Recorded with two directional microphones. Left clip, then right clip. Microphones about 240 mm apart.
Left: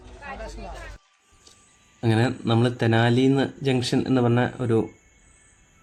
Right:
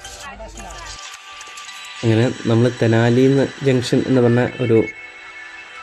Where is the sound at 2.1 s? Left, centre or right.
Centre.